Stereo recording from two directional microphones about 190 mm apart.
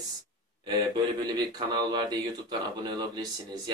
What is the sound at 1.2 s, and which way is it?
A man's voice, 20° right (ahead or behind).